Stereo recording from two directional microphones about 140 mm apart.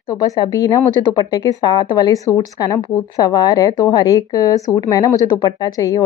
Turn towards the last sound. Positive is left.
turn(degrees=25)  # may be behind; listen again after turning